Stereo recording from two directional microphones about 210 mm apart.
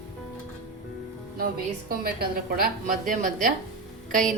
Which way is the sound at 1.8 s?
45° right (ahead or behind).